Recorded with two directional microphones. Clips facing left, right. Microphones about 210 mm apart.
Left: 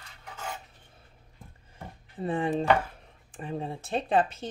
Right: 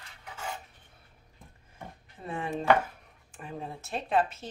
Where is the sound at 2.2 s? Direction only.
30° left (ahead or behind).